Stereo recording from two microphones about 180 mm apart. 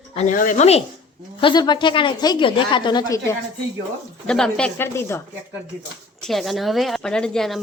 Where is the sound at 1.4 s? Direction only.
25° left (ahead or behind).